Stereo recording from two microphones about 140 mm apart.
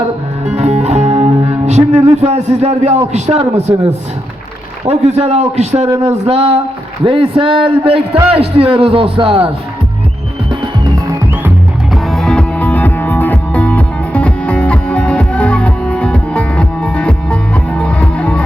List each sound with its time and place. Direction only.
0.4 s music: 55° right (ahead or behind)
3.1 s a man's voice: 55° right (ahead or behind)
11.9 s music: centre (ahead or behind)